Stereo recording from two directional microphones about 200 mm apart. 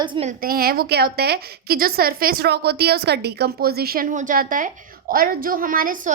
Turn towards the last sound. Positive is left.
turn(degrees=-45)  # may be behind; listen again after turning